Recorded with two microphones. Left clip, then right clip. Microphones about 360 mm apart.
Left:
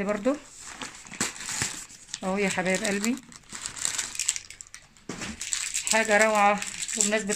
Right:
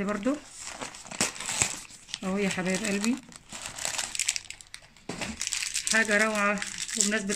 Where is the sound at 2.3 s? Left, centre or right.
Centre.